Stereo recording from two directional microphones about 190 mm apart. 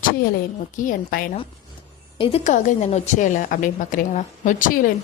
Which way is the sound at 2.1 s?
30° left (ahead or behind).